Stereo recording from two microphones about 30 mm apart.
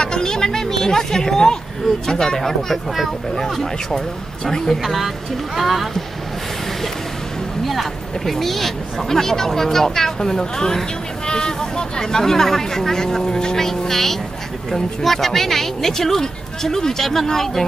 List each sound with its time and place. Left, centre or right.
0.0 s a sound: left
2.0 s speech: centre
4.8 s speech: centre
7.6 s speech: centre